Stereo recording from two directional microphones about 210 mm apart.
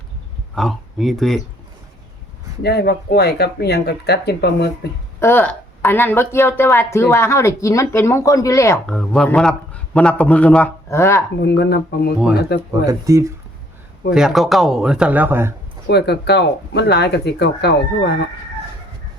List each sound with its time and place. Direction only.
0.5 s speech: centre (ahead or behind)
2.6 s speech: 50° left (ahead or behind)
5.2 s a woman's voice: 10° left (ahead or behind)
8.9 s a man's voice: 5° left (ahead or behind)
11.3 s speech: 50° left (ahead or behind)
12.8 s speech: 15° right (ahead or behind)
14.1 s a man's voice: centre (ahead or behind)
15.9 s speech: 50° left (ahead or behind)